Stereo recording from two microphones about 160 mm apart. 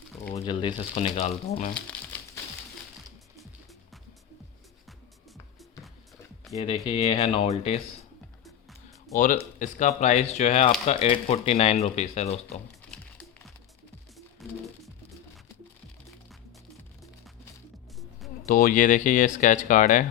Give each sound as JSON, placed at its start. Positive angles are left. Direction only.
{"t": 0.3, "sound": "speech", "side_deg": 30}
{"t": 6.6, "sound": "speech", "side_deg": 40}
{"t": 9.1, "sound": "speech", "side_deg": 55}
{"t": 14.4, "sound": "music", "side_deg": 0}
{"t": 18.4, "sound": "speech", "side_deg": 60}